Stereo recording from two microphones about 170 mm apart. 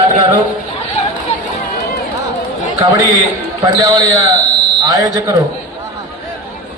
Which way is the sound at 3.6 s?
25° right (ahead or behind).